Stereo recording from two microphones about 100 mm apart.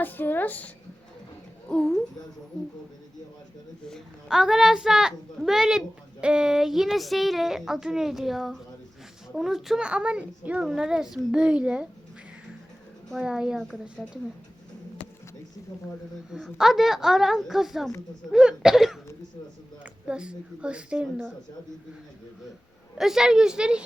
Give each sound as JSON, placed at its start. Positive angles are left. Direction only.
{"t": 0.0, "sound": "speech", "side_deg": 20}
{"t": 1.7, "sound": "a child's voice", "side_deg": 5}
{"t": 3.8, "sound": "a child's voice", "side_deg": 0}
{"t": 13.2, "sound": "a child's voice", "side_deg": -5}
{"t": 16.3, "sound": "a child's voice", "side_deg": -5}
{"t": 23.0, "sound": "a child's voice", "side_deg": -5}